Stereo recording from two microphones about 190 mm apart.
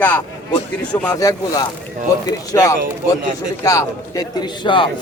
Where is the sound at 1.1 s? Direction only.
20° left (ahead or behind).